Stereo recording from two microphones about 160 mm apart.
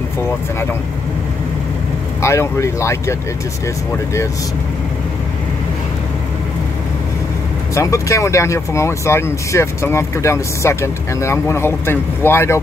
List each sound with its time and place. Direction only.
2.2 s speech: 15° left (ahead or behind)
7.7 s speech: 20° left (ahead or behind)